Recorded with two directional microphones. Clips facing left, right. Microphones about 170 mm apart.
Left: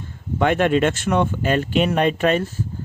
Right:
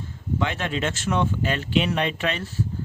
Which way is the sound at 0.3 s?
55° left (ahead or behind).